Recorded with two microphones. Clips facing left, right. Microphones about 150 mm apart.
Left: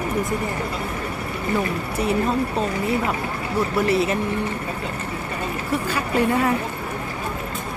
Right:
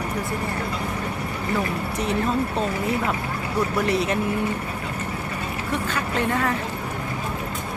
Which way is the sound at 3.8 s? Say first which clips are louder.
Left 4 dB; centre (ahead or behind).